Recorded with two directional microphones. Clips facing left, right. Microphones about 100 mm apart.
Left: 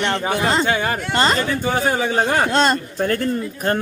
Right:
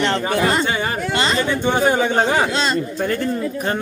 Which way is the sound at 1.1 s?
45° left (ahead or behind).